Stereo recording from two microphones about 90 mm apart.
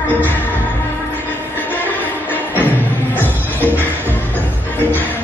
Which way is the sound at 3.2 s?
20° left (ahead or behind).